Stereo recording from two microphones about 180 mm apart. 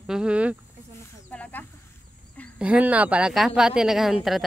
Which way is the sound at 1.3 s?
10° left (ahead or behind).